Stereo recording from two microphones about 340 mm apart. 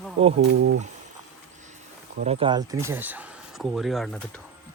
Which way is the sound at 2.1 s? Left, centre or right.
Centre.